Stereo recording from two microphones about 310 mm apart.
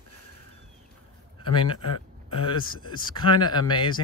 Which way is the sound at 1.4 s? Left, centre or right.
Centre.